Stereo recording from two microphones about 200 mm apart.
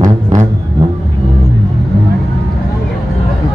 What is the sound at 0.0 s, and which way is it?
Vehicle, 40° right (ahead or behind).